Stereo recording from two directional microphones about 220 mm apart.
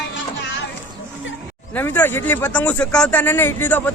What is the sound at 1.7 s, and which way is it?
Speech, 10° left (ahead or behind).